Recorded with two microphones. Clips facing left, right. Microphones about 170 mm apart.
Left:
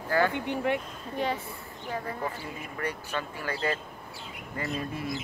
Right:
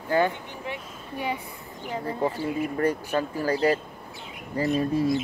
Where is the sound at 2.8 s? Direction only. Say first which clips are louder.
Right 6 dB; 40° right (ahead or behind).